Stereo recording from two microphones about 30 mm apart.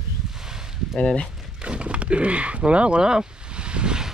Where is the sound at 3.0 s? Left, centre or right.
Right.